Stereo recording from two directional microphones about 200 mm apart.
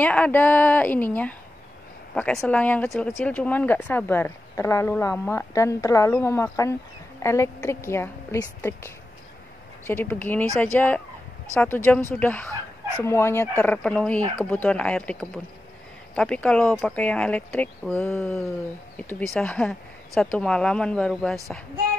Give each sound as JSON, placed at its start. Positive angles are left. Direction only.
{"t": 0.0, "sound": "speech", "side_deg": 10}